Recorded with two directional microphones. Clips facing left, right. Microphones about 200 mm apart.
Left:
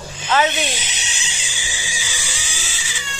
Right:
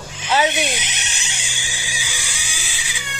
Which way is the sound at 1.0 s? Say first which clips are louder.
Even; 60° right (ahead or behind).